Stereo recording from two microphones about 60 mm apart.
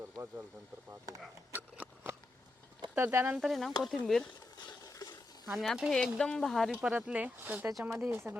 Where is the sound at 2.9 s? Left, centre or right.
Right.